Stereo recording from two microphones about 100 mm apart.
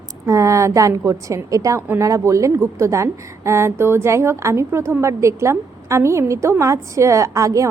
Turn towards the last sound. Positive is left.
turn(degrees=-35)  # may be behind; listen again after turning